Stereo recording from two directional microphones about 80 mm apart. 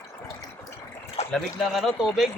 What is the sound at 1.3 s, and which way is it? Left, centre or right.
Speech, centre.